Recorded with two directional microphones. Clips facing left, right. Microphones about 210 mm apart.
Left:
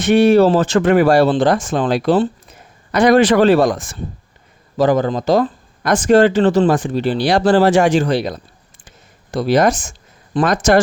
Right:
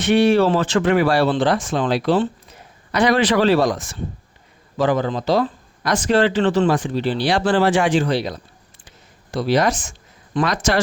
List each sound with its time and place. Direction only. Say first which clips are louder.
0.0 s speech: left 4 dB; 45° left (ahead or behind)